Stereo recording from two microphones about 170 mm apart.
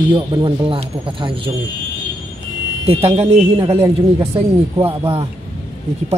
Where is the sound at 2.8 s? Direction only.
35° right (ahead or behind).